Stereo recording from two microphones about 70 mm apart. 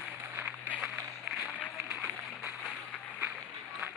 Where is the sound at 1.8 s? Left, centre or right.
Centre.